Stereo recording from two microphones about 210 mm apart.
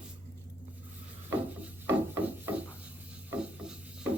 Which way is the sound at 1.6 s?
10° right (ahead or behind).